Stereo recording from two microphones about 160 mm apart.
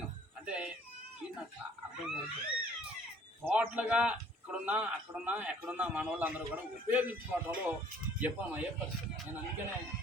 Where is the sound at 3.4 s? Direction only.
10° right (ahead or behind).